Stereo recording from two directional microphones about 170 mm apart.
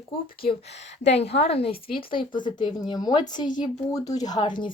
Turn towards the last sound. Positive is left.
turn(degrees=30)  # may be behind; listen again after turning